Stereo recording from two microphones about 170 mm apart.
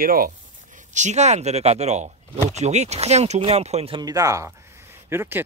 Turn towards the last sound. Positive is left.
turn(degrees=-15)  # may be behind; listen again after turning